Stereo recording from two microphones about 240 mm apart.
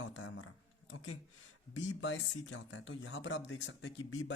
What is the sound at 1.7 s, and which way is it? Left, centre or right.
Speech, left.